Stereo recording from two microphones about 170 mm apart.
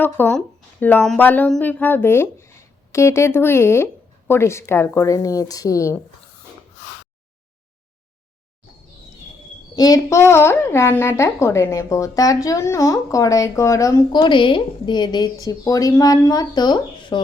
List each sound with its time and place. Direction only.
0.0 s speech: 10° left (ahead or behind)
9.7 s a woman's voice: 20° left (ahead or behind)